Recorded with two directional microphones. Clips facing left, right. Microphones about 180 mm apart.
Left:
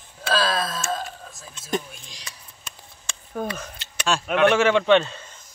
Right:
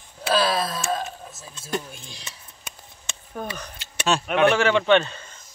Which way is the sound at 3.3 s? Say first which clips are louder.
Left 3 dB; centre (ahead or behind).